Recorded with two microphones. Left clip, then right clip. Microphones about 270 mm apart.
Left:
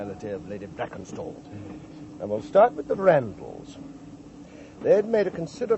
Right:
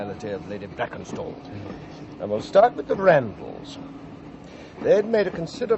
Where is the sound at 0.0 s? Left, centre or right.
Left.